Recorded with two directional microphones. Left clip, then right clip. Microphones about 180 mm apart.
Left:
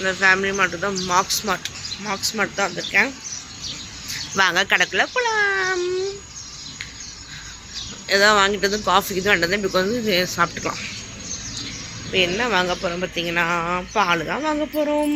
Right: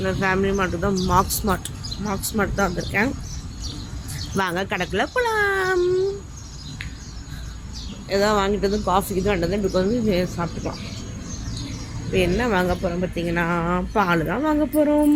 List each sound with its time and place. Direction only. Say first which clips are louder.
0.0 s speech: left 4 dB; 5° right (ahead or behind)
1.3 s speech: left 2 dB; 20° right (ahead or behind)
4.4 s speech: left 6 dB; centre (ahead or behind)
4.9 s speech: left 1 dB; 15° right (ahead or behind)
8.1 s speech: left 4 dB; 5° left (ahead or behind)
10.3 s speech: left 7 dB; 15° left (ahead or behind)
12.1 s speech: left 2 dB; 5° right (ahead or behind)